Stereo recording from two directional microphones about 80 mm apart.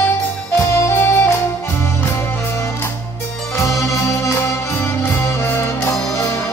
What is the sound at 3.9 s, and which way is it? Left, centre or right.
Music, left.